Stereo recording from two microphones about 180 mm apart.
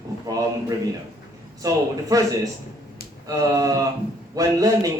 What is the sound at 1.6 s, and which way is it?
A man's voice, 20° right (ahead or behind).